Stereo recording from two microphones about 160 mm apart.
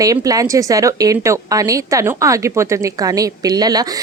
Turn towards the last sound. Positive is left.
turn(degrees=-25)  # may be behind; listen again after turning